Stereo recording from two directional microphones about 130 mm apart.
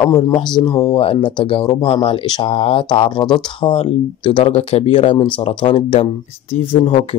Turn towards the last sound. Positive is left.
turn(degrees=40)  # may be behind; listen again after turning